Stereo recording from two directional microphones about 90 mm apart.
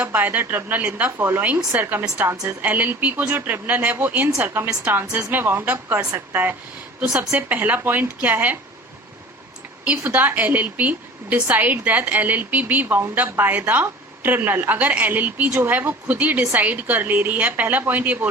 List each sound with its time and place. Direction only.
0.0 s speech: 20° right (ahead or behind)
9.8 s speech: 20° right (ahead or behind)